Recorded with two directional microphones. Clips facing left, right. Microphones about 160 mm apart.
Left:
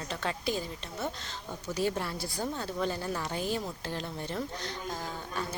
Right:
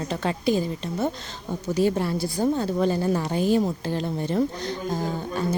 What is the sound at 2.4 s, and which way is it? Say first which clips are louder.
Speech: right 10 dB; 35° right (ahead or behind).